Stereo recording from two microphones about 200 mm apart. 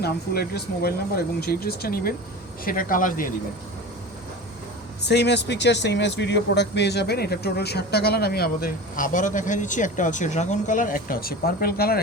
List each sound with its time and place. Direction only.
0.0 s speech: 50° left (ahead or behind)
5.0 s speech: 55° left (ahead or behind)